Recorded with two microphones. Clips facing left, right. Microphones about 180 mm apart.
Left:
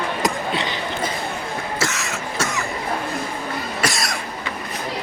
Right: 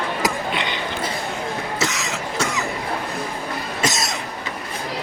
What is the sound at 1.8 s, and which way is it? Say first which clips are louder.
Cough: right 1 dB; 15° right (ahead or behind).